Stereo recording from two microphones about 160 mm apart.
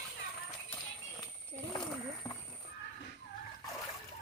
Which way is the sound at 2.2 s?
25° left (ahead or behind).